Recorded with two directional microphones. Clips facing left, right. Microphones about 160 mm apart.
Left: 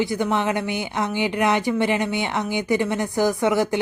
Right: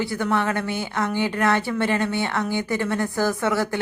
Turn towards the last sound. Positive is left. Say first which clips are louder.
# left 3 dB
turn(degrees=15)  # may be behind; listen again after turning